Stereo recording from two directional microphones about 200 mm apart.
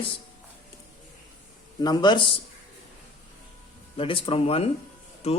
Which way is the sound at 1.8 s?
20° left (ahead or behind).